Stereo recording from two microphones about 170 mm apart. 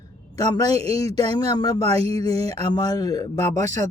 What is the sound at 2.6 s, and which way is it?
Speech, 25° left (ahead or behind).